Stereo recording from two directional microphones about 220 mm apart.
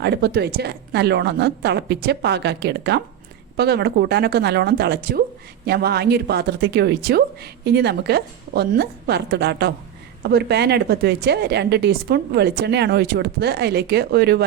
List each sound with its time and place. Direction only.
0.0 s a woman's voice: 50° right (ahead or behind)